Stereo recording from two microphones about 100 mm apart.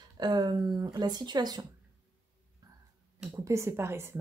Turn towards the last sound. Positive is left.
turn(degrees=-25)  # may be behind; listen again after turning